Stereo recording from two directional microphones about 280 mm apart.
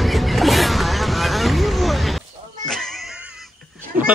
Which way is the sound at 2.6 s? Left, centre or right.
Centre.